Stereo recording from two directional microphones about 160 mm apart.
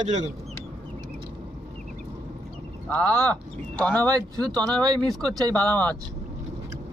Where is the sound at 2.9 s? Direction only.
10° left (ahead or behind).